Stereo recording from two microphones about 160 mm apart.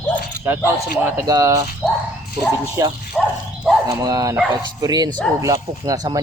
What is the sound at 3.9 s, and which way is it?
Speech, 20° right (ahead or behind).